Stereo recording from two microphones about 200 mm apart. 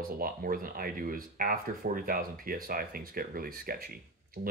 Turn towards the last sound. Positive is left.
turn(degrees=-50)  # may be behind; listen again after turning